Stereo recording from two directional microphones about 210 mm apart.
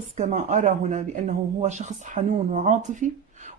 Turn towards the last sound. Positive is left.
turn(degrees=-35)  # may be behind; listen again after turning